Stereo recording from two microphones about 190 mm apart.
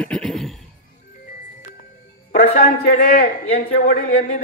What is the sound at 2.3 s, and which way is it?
A man's voice, 55° left (ahead or behind).